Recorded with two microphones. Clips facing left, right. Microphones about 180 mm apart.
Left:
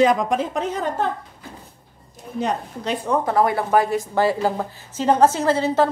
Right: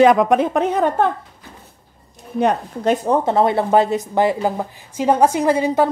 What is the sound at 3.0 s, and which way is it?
Speech, 25° right (ahead or behind).